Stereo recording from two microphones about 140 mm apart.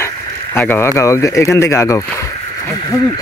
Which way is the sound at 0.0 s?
15° left (ahead or behind).